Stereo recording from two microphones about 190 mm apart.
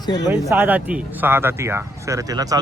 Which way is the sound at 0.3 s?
15° right (ahead or behind).